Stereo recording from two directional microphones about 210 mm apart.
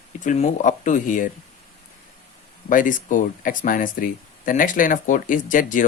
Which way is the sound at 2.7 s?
40° left (ahead or behind).